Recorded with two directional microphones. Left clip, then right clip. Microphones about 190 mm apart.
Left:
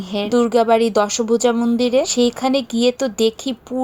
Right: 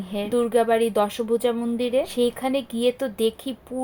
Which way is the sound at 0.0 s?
35° left (ahead or behind).